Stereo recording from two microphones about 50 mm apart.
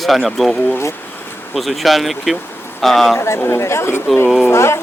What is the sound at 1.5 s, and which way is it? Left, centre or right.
Speech, centre.